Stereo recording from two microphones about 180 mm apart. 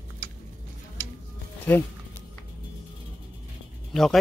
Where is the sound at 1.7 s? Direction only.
10° left (ahead or behind).